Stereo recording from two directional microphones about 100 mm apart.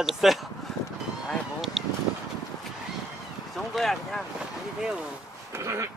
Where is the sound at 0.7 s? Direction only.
5° left (ahead or behind).